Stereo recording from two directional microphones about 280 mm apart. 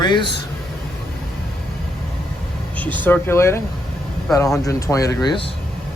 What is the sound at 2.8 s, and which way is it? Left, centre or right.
Speech, centre.